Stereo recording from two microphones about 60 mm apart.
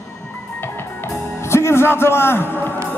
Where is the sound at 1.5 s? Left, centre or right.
Left.